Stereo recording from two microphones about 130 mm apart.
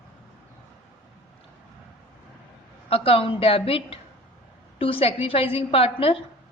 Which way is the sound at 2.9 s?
45° left (ahead or behind).